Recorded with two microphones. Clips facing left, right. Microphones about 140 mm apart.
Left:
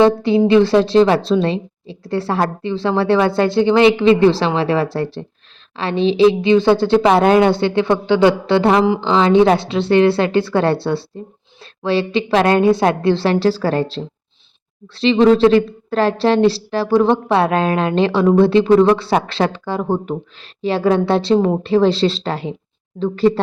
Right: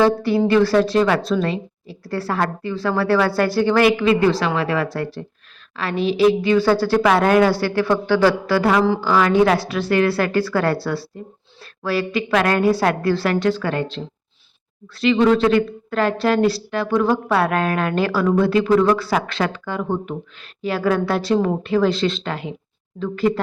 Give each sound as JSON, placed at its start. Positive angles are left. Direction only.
{"t": 0.0, "sound": "a woman's voice", "side_deg": 20}